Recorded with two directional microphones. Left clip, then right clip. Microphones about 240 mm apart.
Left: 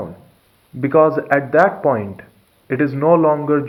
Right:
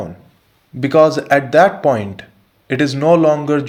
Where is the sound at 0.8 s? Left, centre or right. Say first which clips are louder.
Right 2 dB; right.